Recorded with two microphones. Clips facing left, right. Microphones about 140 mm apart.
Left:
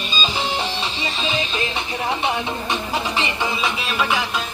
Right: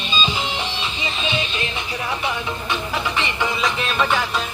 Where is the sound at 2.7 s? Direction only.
30° left (ahead or behind).